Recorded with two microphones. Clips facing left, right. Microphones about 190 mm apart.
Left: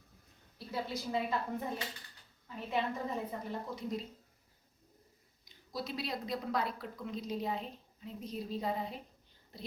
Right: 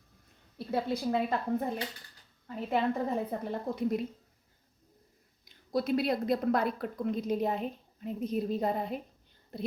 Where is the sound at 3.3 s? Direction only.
60° right (ahead or behind).